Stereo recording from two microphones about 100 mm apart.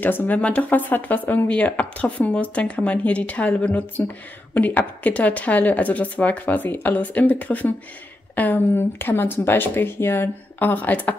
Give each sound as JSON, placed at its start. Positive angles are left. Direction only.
{"t": 0.0, "sound": "speech", "side_deg": 20}